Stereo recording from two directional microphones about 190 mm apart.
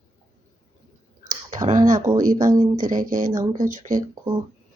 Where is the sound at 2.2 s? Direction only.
45° right (ahead or behind).